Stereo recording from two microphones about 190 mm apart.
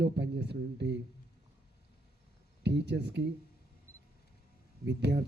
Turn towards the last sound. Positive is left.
turn(degrees=-65)  # may be behind; listen again after turning